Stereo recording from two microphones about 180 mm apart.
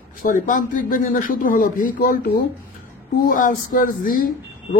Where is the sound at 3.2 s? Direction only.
50° left (ahead or behind).